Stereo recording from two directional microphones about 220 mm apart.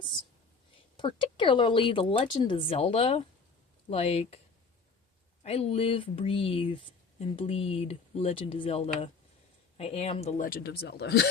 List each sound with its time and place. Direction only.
0.0 s speech: 20° left (ahead or behind)
5.4 s speech: 30° left (ahead or behind); by 11.3 s 50° left (ahead or behind)